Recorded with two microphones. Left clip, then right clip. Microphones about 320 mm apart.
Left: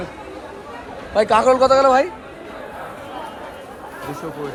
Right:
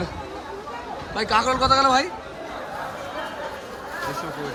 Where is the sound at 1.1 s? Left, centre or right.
Centre.